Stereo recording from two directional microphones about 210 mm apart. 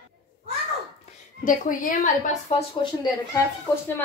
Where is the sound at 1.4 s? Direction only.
40° left (ahead or behind).